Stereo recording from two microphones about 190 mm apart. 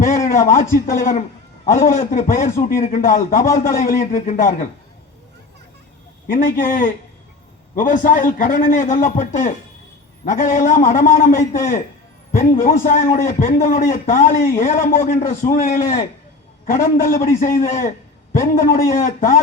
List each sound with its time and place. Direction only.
0.0 s a man's voice: 45° left (ahead or behind)
6.2 s a man's voice: 45° left (ahead or behind)